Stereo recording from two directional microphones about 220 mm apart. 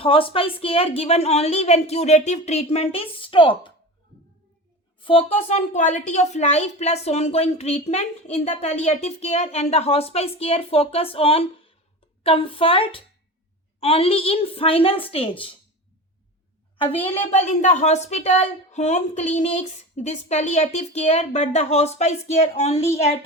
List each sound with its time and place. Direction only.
0.0 s a woman's voice: 25° left (ahead or behind)
4.9 s a woman's voice: 25° left (ahead or behind)
16.7 s a woman's voice: 25° left (ahead or behind)